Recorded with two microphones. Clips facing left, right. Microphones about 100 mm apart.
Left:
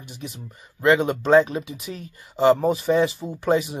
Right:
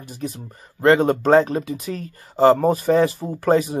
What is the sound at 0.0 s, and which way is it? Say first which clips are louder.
Speech: right 6 dB; 40° right (ahead or behind).